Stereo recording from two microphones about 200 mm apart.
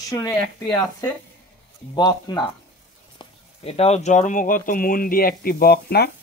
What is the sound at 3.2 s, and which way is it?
Speech, 30° left (ahead or behind).